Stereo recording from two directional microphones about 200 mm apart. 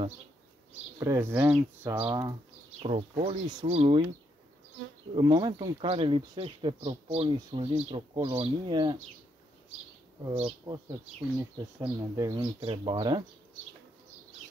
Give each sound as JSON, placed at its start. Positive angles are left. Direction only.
{"t": 0.9, "sound": "speech", "side_deg": -15}
{"t": 2.0, "sound": "speech", "side_deg": -20}
{"t": 2.8, "sound": "speech", "side_deg": -30}
{"t": 5.1, "sound": "speech", "side_deg": -25}
{"t": 10.7, "sound": "speech", "side_deg": -20}